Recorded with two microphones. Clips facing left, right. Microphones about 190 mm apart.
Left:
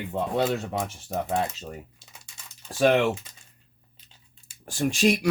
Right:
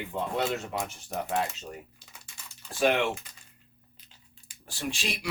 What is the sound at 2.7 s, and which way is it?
Speech, 40° left (ahead or behind).